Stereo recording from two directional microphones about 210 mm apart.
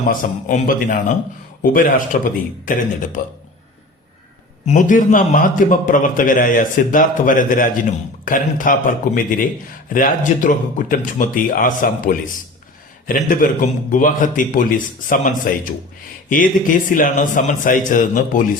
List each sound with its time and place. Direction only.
0.1 s a man's voice: 40° left (ahead or behind)
4.6 s a man's voice: 35° left (ahead or behind)
16.9 s a man's voice: 40° left (ahead or behind)